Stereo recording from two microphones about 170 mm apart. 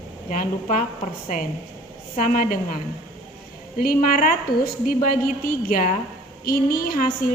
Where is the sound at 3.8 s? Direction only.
55° left (ahead or behind).